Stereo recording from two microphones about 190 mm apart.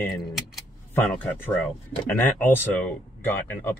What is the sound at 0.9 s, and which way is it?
Speech, 10° left (ahead or behind).